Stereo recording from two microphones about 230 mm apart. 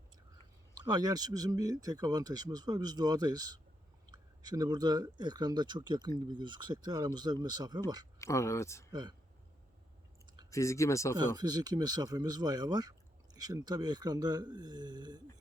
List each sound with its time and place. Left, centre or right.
0.7 s speech: centre
8.2 s speech: centre
8.9 s speech: centre
10.5 s speech: centre
11.3 s speech: centre